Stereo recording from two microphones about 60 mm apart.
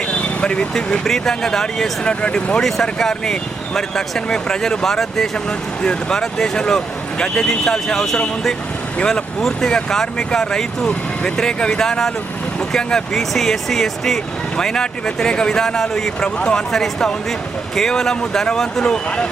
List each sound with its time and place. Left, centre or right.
0.2 s speech: centre
2.6 s speech: centre